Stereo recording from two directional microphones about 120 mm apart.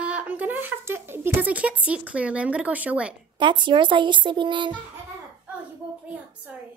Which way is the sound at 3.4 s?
40° right (ahead or behind).